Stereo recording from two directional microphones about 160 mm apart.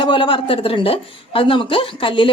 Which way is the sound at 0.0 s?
30° left (ahead or behind).